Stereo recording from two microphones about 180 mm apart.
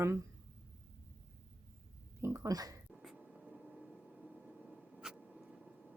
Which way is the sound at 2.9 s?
Centre (ahead or behind).